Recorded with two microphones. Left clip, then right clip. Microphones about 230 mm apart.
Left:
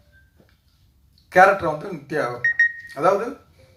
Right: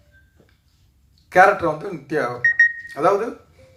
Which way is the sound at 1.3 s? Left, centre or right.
Right.